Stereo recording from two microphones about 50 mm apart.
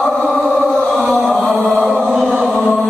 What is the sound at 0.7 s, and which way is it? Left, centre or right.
Chant, centre.